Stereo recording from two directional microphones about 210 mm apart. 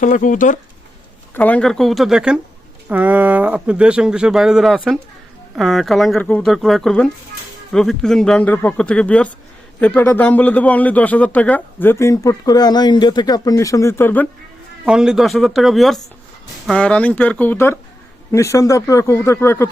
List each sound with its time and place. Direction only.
0.0 s speech: 40° left (ahead or behind)
1.3 s a man's voice: 5° left (ahead or behind)
14.8 s a man's voice: 5° right (ahead or behind); by 19.7 s 10° left (ahead or behind)